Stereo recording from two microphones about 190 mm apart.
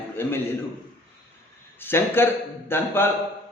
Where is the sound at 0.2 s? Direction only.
10° left (ahead or behind).